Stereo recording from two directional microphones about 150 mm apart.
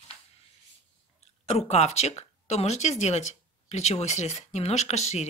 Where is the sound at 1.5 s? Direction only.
45° left (ahead or behind).